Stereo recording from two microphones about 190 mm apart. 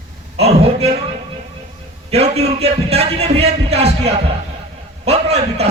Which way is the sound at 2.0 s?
35° right (ahead or behind).